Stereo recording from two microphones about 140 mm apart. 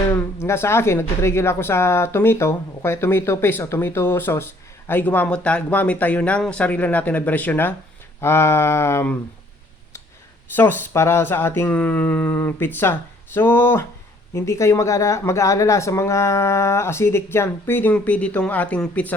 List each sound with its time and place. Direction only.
0.1 s speech: 20° left (ahead or behind)
10.5 s speech: 15° left (ahead or behind)